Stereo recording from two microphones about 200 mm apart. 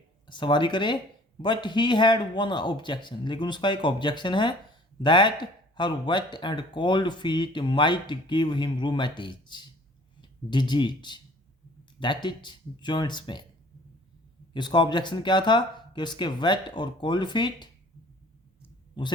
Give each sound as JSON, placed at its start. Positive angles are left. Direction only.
{"t": 0.3, "sound": "a man's voice", "side_deg": 25}
{"t": 14.5, "sound": "a man's voice", "side_deg": 20}
{"t": 19.0, "sound": "a man's voice", "side_deg": 25}